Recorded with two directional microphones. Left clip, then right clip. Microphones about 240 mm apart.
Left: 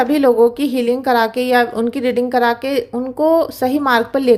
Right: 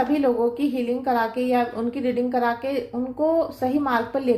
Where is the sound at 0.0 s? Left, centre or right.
Left.